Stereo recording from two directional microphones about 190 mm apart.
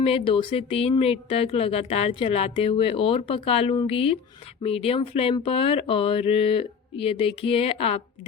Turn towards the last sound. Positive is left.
turn(degrees=30)  # may be behind; listen again after turning